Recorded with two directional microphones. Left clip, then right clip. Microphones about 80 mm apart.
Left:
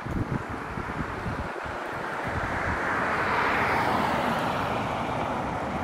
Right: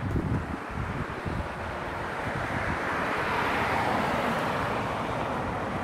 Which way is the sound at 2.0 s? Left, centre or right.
Centre.